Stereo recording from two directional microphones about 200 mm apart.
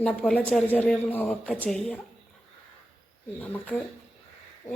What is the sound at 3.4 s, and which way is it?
Speech, 10° left (ahead or behind).